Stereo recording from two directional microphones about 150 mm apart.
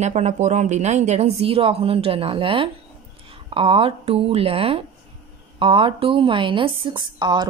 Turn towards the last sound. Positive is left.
turn(degrees=-30)  # may be behind; listen again after turning